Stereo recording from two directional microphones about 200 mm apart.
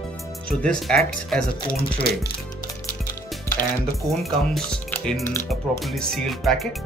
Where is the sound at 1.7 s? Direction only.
50° left (ahead or behind).